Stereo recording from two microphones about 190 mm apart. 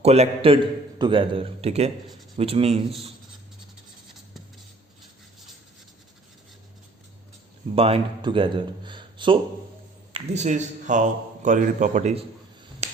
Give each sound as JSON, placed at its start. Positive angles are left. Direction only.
{"t": 0.0, "sound": "a man's voice", "side_deg": -35}
{"t": 7.8, "sound": "a man's voice", "side_deg": -30}
{"t": 12.8, "sound": "finger snapping", "side_deg": -35}